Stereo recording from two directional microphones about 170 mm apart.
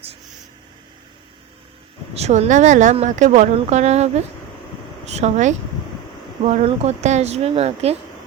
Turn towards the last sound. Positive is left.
turn(degrees=-35)  # may be behind; listen again after turning